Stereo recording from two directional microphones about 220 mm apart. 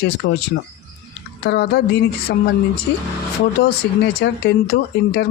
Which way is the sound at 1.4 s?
50° left (ahead or behind).